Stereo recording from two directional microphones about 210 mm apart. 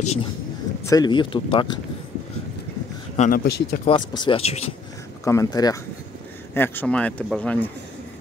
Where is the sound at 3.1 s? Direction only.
35° left (ahead or behind).